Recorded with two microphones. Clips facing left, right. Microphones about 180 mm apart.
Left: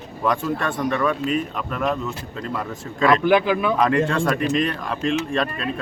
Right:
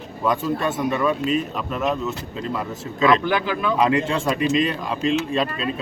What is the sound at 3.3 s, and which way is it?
Speech, 15° left (ahead or behind).